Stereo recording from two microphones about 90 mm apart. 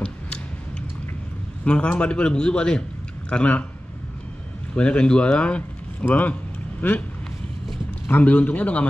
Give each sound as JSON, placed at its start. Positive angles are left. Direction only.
{"t": 1.6, "sound": "a man's voice", "side_deg": 15}
{"t": 4.7, "sound": "speech", "side_deg": 10}
{"t": 8.1, "sound": "a man's voice", "side_deg": 15}